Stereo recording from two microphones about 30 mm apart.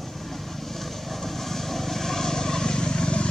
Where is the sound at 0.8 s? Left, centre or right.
Centre.